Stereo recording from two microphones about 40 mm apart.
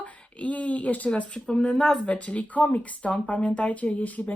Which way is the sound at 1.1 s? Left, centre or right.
Left.